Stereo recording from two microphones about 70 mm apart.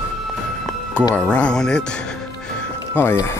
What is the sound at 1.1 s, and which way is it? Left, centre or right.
Speech, centre.